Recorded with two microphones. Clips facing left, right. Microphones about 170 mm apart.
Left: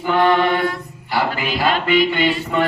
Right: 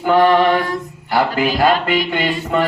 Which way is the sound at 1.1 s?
45° right (ahead or behind).